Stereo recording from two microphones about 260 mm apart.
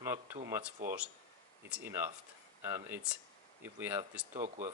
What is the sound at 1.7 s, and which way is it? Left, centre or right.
Speech, centre.